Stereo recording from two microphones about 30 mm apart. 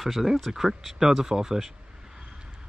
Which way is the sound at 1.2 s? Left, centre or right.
Centre.